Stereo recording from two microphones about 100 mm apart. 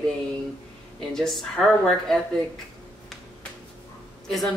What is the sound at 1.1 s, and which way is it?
Speech, 5° left (ahead or behind).